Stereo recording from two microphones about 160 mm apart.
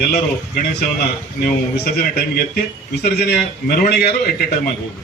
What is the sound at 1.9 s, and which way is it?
A man's voice, 75° left (ahead or behind).